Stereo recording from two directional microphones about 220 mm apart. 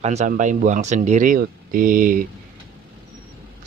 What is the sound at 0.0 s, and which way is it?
Speech, 30° right (ahead or behind).